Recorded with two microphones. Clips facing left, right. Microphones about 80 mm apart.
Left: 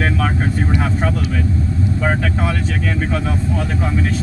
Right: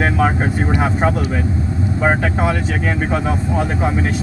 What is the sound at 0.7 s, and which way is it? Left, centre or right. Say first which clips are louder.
Speech: right 3 dB; right.